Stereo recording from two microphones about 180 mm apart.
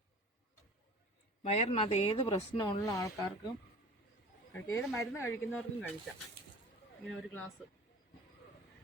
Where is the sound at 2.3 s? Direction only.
15° left (ahead or behind).